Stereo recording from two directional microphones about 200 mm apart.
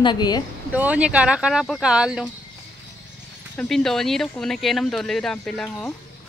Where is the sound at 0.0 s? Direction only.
20° left (ahead or behind).